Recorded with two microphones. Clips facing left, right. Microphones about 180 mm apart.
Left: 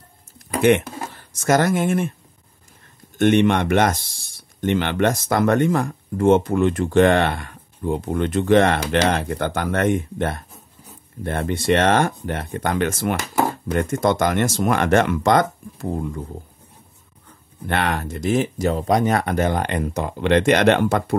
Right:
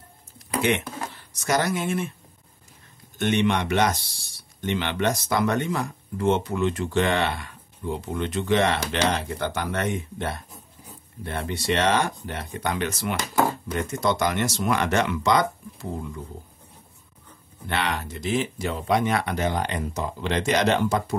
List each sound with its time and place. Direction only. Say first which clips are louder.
0.6 s speech: left 8 dB; 50° left (ahead or behind)
3.2 s speech: left 7 dB; 50° left (ahead or behind)
17.6 s speech: left 5 dB; 50° left (ahead or behind)